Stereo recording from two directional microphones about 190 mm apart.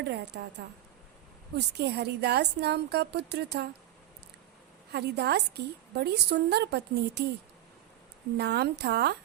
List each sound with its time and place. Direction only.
0.0 s a woman's voice: 60° right (ahead or behind)
1.5 s a woman's voice: 60° right (ahead or behind)
4.9 s a woman's voice: 60° right (ahead or behind)
8.4 s a woman's voice: 60° right (ahead or behind)